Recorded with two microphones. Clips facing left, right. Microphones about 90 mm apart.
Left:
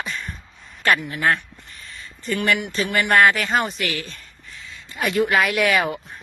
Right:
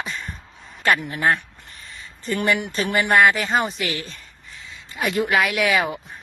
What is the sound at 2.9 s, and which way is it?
Speech, 10° right (ahead or behind).